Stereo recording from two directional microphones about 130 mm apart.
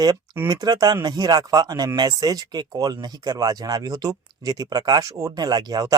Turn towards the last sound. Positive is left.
turn(degrees=-30)  # may be behind; listen again after turning